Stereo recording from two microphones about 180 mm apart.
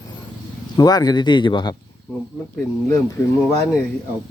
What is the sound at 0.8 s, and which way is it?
Speech, 20° left (ahead or behind).